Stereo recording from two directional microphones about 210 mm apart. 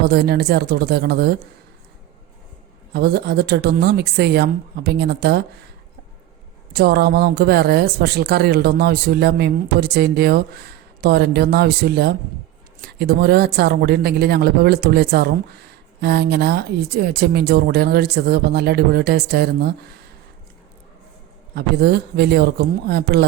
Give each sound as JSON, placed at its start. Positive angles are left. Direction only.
{"t": 0.0, "sound": "speech", "side_deg": -50}
{"t": 2.9, "sound": "speech", "side_deg": -50}
{"t": 6.7, "sound": "speech", "side_deg": -50}
{"t": 21.5, "sound": "speech", "side_deg": -50}